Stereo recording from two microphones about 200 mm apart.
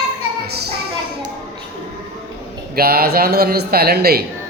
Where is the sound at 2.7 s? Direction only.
50° right (ahead or behind).